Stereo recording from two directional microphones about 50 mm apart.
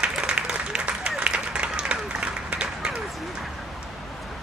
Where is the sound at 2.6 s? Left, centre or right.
Centre.